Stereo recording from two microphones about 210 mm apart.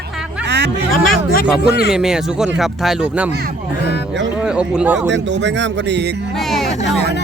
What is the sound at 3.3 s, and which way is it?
Speech, 45° right (ahead or behind).